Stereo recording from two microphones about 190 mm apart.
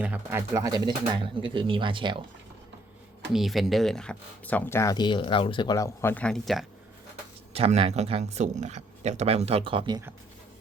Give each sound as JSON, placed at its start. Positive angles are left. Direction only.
{"t": 0.0, "sound": "speech", "side_deg": -10}
{"t": 3.3, "sound": "speech", "side_deg": 0}
{"t": 7.5, "sound": "speech", "side_deg": -30}